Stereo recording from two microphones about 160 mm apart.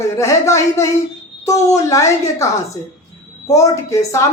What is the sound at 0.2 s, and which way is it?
A woman's voice, 20° left (ahead or behind).